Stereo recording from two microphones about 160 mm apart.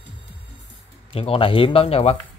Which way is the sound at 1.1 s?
35° left (ahead or behind).